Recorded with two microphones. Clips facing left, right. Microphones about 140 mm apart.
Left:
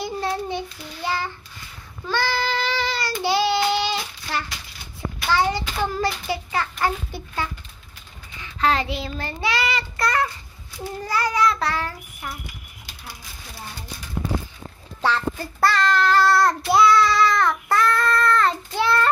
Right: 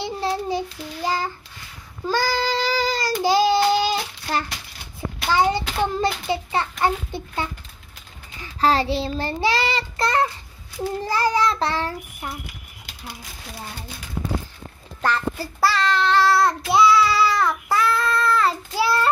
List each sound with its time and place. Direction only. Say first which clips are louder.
0.2 s child singing: right 4 dB; 35° right (ahead or behind)
5.3 s child singing: right 2 dB; 20° right (ahead or behind)
8.4 s child singing: right 2 dB; 35° right (ahead or behind)
11.0 s a child's voice: right 1 dB; 30° right (ahead or behind)
15.0 s child singing: even; centre (ahead or behind)